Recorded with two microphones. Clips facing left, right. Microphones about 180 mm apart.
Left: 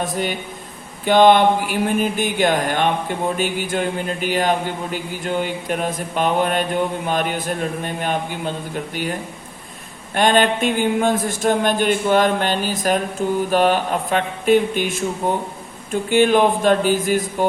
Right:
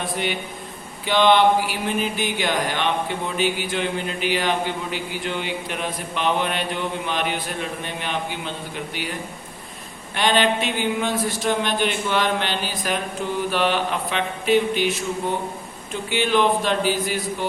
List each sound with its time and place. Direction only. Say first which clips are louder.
0.0 s speech: left 3 dB; 45° left (ahead or behind)
10.2 s speech: left 4 dB; 50° left (ahead or behind)